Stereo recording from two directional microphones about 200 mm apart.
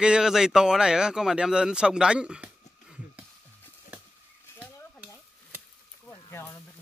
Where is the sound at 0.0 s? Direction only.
5° right (ahead or behind).